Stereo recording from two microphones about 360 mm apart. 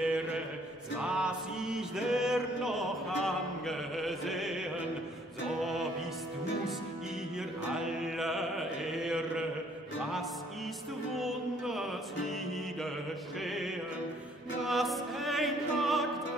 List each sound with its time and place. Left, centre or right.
0.0 s mantra: centre
1.0 s music: centre
7.3 s mantra: centre
11.1 s music: centre
13.4 s music: centre